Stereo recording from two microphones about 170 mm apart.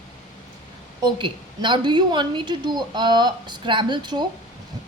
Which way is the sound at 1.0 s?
25° right (ahead or behind).